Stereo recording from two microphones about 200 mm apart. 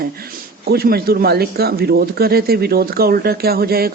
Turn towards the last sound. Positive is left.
turn(degrees=-50)  # may be behind; listen again after turning